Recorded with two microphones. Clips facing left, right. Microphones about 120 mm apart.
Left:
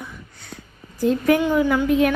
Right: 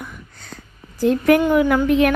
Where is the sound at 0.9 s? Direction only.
65° right (ahead or behind).